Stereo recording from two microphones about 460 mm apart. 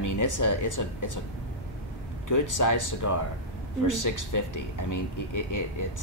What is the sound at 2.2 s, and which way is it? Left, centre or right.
Speech, left.